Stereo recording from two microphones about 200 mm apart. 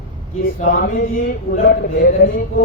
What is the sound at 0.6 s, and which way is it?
A man's voice, 40° left (ahead or behind).